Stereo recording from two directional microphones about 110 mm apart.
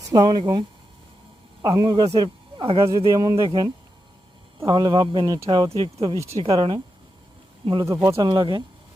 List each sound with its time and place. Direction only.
0.1 s speech: 40° right (ahead or behind)
1.6 s speech: 40° right (ahead or behind); by 2.9 s 55° right (ahead or behind)
3.1 s speech: 30° right (ahead or behind)
5.7 s speech: 60° right (ahead or behind)
7.9 s speech: 20° right (ahead or behind)
8.2 s speech: 45° right (ahead or behind)